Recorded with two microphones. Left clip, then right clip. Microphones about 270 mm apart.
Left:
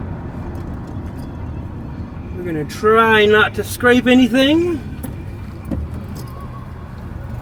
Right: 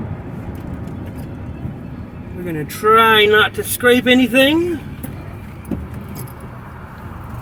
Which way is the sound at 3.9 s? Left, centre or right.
Right.